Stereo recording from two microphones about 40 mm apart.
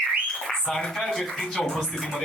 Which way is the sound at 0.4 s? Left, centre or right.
Centre.